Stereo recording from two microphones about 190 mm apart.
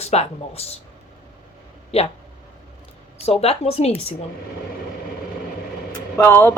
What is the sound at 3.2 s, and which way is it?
Speech, 35° left (ahead or behind).